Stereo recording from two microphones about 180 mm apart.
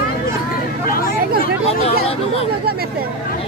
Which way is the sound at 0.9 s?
55° left (ahead or behind).